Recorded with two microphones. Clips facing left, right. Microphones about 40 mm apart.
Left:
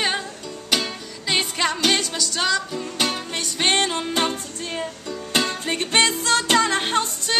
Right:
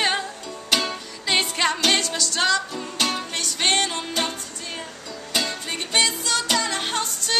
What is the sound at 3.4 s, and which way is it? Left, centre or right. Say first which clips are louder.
Music: left 2 dB; centre.